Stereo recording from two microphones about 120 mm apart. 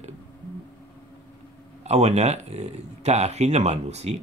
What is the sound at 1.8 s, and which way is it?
Speech, 65° right (ahead or behind).